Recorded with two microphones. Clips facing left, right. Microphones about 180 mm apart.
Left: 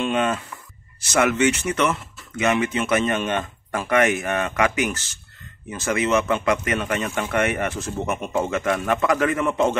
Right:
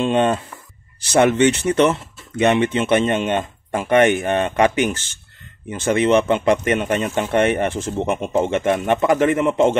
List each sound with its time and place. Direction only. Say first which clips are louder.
0.0 s speech: right 5 dB; 30° right (ahead or behind)